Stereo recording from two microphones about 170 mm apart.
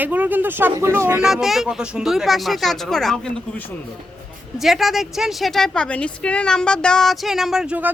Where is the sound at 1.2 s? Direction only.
5° right (ahead or behind).